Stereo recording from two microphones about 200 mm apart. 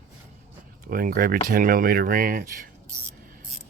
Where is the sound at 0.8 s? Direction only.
45° right (ahead or behind).